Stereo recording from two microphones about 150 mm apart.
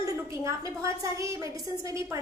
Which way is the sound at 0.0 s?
20° right (ahead or behind).